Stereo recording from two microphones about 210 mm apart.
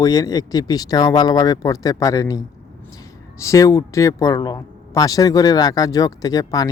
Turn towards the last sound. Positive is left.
turn(degrees=15)  # may be behind; listen again after turning